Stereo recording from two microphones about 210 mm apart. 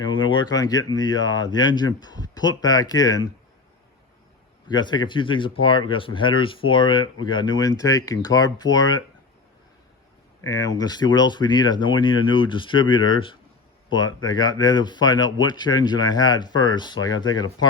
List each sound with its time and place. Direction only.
0.4 s speech: 15° left (ahead or behind)
4.7 s speech: 20° left (ahead or behind)
10.4 s speech: 15° left (ahead or behind)